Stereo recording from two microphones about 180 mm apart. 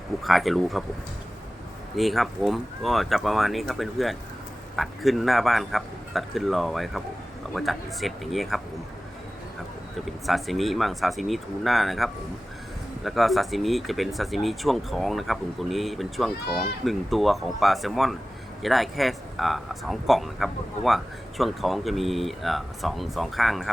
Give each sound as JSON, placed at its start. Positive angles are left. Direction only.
{"t": 0.2, "sound": "speech", "side_deg": 0}
{"t": 2.0, "sound": "speech", "side_deg": 0}
{"t": 10.1, "sound": "speech", "side_deg": 0}